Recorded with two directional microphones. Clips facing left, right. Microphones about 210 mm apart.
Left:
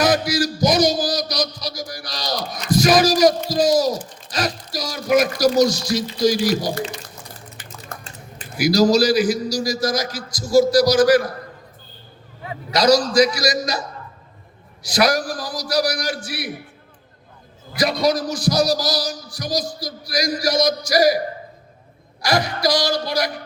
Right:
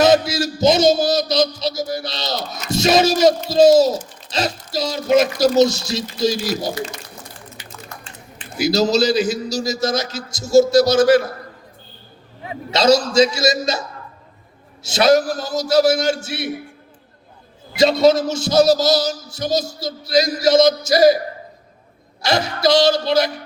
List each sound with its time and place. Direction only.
0.0 s speech: 25° right (ahead or behind)
7.5 s a sound: 50° left (ahead or behind)
8.5 s speech: 25° right (ahead or behind)
12.5 s speech: 25° right (ahead or behind)
17.7 s speech: 25° right (ahead or behind)
22.2 s speech: 25° right (ahead or behind)